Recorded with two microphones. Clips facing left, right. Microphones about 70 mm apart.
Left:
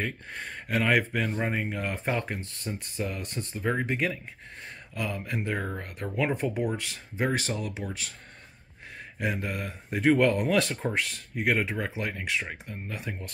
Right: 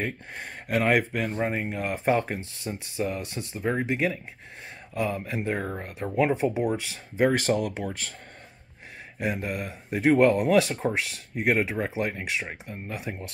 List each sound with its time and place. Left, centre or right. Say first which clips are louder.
0.0 s speech: right 1 dB; centre
2.1 s speech: right 5 dB; right
2.6 s speech: right 4 dB; centre
4.9 s speech: right 4 dB; right; by 6.8 s centre
7.2 s speech: right 6 dB; right
9.2 s speech: right 2 dB; centre